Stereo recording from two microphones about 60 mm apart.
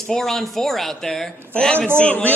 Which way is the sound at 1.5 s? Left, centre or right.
Centre.